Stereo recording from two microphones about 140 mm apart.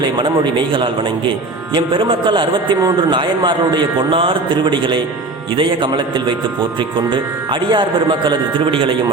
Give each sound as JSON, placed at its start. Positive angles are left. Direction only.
{"t": 0.0, "sound": "speech", "side_deg": -35}